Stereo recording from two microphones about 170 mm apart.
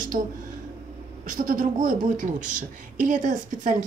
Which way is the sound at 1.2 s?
50° right (ahead or behind).